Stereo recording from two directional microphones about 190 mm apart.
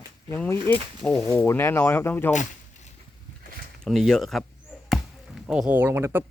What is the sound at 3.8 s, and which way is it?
Speech, centre (ahead or behind).